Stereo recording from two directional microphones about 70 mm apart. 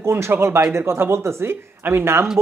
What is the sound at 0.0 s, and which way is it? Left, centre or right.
Speech, right.